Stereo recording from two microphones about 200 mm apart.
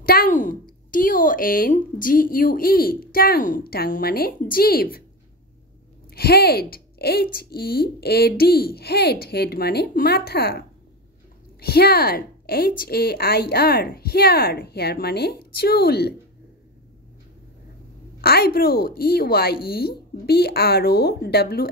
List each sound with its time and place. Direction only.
0.0 s speech: 50° left (ahead or behind)
6.0 s a woman's voice: 50° left (ahead or behind)
11.6 s speech: 50° left (ahead or behind)
18.2 s speech: 50° left (ahead or behind)